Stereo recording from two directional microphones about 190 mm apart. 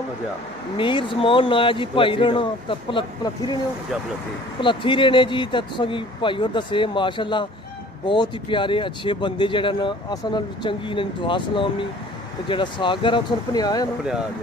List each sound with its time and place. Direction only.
0.7 s speech: 25° left (ahead or behind)
4.6 s speech: 25° left (ahead or behind)